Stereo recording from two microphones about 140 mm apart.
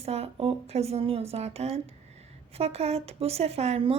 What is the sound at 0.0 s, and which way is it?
A woman's voice, 45° right (ahead or behind).